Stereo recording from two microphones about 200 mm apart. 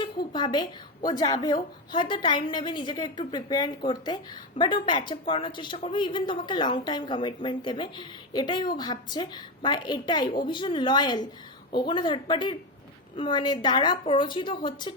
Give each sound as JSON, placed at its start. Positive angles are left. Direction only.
{"t": 0.0, "sound": "a woman's voice", "side_deg": 25}